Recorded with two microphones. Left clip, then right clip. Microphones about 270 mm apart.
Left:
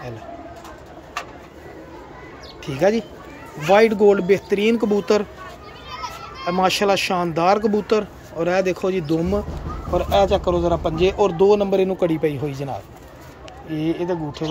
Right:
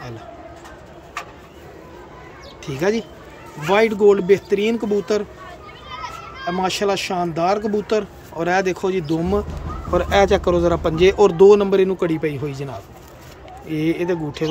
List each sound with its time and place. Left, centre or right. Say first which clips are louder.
2.6 s speech: left 2 dB; centre
5.9 s children playing: even; left
6.4 s speech: left 2 dB; centre
10.1 s speech: right 2 dB; centre
13.7 s speech: right 2 dB; centre